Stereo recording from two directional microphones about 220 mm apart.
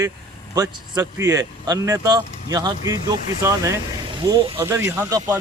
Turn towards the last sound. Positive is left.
turn(degrees=-15)  # may be behind; listen again after turning